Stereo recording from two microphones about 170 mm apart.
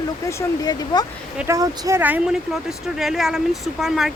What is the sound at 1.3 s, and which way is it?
Speech, 15° right (ahead or behind).